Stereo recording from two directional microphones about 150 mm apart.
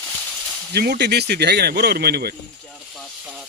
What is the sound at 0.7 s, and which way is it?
Speech, 90° right.